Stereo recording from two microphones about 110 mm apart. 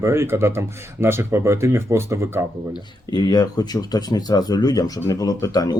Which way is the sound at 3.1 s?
40° left (ahead or behind).